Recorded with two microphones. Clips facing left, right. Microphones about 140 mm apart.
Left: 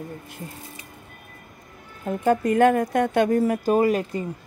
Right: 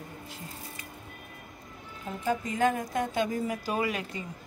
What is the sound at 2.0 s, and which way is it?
Speech, 60° left (ahead or behind).